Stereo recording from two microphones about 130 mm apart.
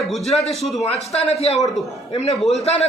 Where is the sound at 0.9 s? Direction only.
55° left (ahead or behind).